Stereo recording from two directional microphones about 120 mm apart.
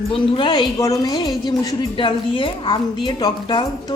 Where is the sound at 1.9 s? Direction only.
45° left (ahead or behind).